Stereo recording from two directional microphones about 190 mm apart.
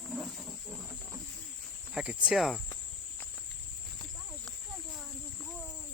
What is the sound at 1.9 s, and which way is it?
Speech, 5° right (ahead or behind).